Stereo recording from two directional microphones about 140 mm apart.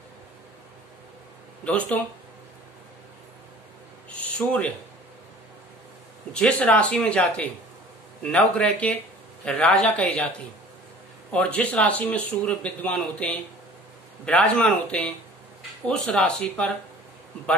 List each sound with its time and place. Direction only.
1.6 s speech: 10° left (ahead or behind)
4.4 s speech: 10° left (ahead or behind)
6.3 s speech: 10° left (ahead or behind)
11.3 s speech: 10° left (ahead or behind)